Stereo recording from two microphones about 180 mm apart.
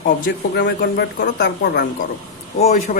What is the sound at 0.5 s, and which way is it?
Speech, 70° left (ahead or behind).